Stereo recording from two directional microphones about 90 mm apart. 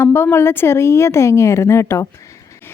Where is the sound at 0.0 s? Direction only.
25° left (ahead or behind).